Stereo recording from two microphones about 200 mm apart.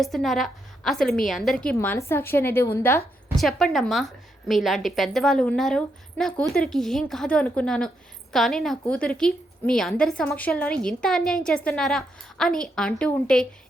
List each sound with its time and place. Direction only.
0.0 s a woman's voice: centre (ahead or behind)
3.3 s a woman's voice: centre (ahead or behind)